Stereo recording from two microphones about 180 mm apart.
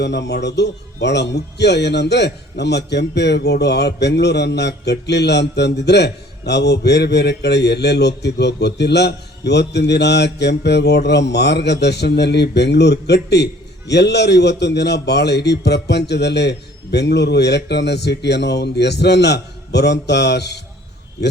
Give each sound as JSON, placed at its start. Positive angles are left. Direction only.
{"t": 0.0, "sound": "speech", "side_deg": 75}